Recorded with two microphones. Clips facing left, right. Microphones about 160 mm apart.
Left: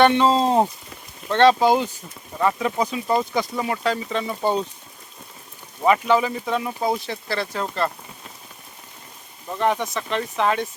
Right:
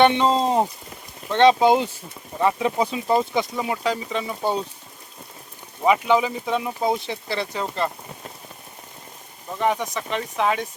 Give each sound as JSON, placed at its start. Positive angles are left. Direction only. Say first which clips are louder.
{"t": 0.0, "sound": "speech", "louder": "left 1 dB", "side_deg": -20}
{"t": 3.6, "sound": "speech", "louder": "left 1 dB", "side_deg": -10}
{"t": 5.8, "sound": "speech", "louder": "even", "side_deg": -15}
{"t": 9.6, "sound": "speech", "louder": "left 1 dB", "side_deg": -10}